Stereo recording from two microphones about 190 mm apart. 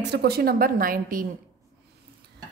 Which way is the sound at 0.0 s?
60° right (ahead or behind).